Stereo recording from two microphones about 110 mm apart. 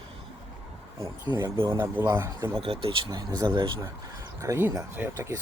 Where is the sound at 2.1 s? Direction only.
20° right (ahead or behind).